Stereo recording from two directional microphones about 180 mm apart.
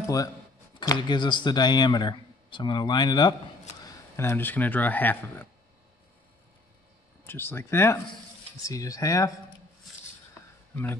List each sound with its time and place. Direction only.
0.7 s speech: 25° left (ahead or behind)
3.8 s speech: 15° left (ahead or behind)
7.2 s speech: 10° left (ahead or behind)
10.7 s speech: 10° left (ahead or behind)